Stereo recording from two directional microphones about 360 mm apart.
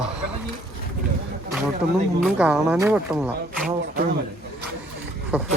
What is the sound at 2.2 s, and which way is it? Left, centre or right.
Speech, centre.